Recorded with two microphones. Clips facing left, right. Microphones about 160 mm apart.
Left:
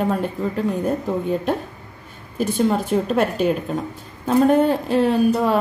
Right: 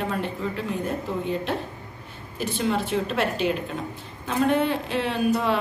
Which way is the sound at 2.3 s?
45° left (ahead or behind).